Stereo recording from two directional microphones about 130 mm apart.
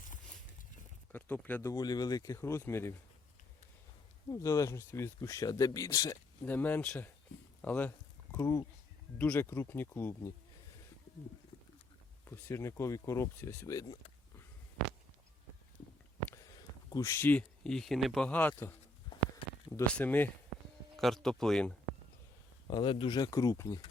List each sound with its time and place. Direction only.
1.1 s speech: 10° left (ahead or behind)
1.6 s speech: 30° left (ahead or behind)
4.3 s speech: 25° left (ahead or behind)
6.4 s speech: 15° left (ahead or behind)
7.6 s a sound: 10° left (ahead or behind)
9.1 s speech: 10° left (ahead or behind)
12.2 s speech: 15° left (ahead or behind)
16.9 s speech: 25° left (ahead or behind)
19.9 s speech: 10° left (ahead or behind)
20.9 s speech: centre (ahead or behind)
22.6 s speech: 35° left (ahead or behind)